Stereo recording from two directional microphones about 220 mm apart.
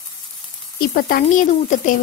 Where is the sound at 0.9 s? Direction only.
40° left (ahead or behind).